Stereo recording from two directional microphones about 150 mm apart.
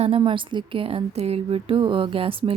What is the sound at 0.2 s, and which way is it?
A woman's voice, 30° right (ahead or behind).